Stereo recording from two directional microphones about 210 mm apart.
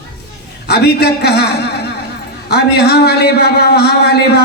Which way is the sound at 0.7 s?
50° left (ahead or behind).